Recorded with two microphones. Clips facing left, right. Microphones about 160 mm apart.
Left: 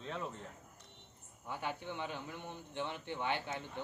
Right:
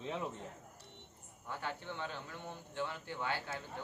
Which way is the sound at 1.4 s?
15° left (ahead or behind).